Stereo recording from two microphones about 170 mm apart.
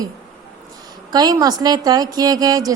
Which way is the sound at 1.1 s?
25° right (ahead or behind).